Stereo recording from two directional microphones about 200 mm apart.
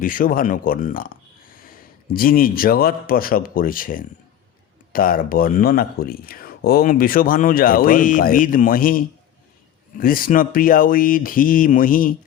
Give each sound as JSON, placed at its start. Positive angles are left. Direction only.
{"t": 0.0, "sound": "speech", "side_deg": 45}